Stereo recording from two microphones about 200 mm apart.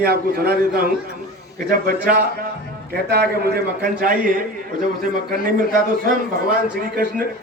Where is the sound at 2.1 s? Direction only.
45° right (ahead or behind).